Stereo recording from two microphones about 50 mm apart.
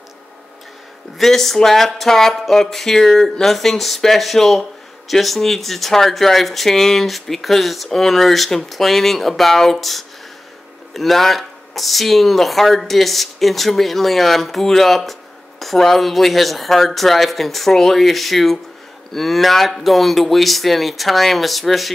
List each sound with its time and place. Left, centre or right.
1.1 s speech: centre